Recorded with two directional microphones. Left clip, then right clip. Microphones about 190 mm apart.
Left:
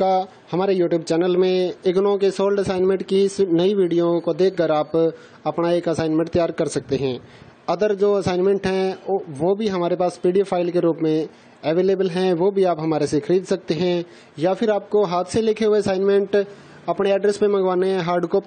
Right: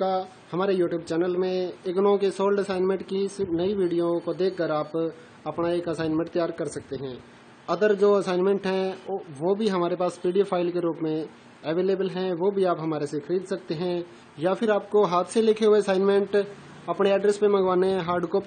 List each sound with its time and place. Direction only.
0.0 s speech: 35° left (ahead or behind)
7.6 s a man's voice: 30° left (ahead or behind)